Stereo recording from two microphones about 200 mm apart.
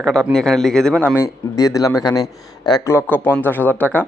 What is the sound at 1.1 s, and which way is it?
A man's voice, 15° left (ahead or behind).